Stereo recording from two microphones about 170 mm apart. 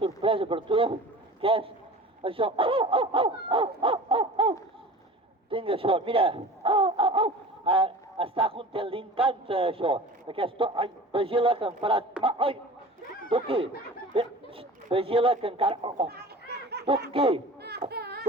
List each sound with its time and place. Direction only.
0.2 s speech: 30° right (ahead or behind)
16.0 s laughter: 75° right (ahead or behind)
17.1 s speech: 30° right (ahead or behind)
17.6 s baby cry: 75° right (ahead or behind)